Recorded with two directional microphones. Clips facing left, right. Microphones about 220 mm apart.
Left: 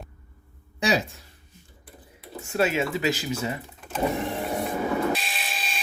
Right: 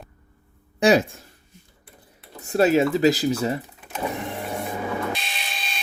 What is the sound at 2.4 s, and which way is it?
Speech, 35° right (ahead or behind).